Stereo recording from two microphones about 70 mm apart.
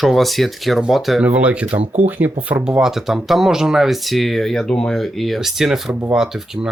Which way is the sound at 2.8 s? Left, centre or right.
Centre.